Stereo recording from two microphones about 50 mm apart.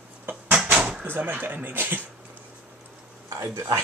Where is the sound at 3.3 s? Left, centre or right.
Right.